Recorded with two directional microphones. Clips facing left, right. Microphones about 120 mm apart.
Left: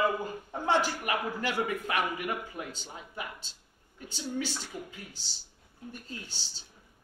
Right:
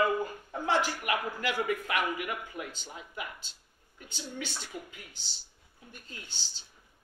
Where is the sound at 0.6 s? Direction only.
35° left (ahead or behind).